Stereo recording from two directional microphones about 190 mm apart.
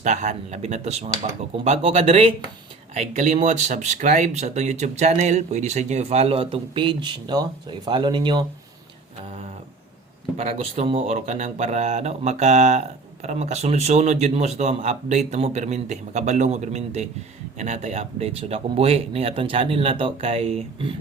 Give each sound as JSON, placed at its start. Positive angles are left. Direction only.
{"t": 0.0, "sound": "speech", "side_deg": -40}
{"t": 10.3, "sound": "speech", "side_deg": -35}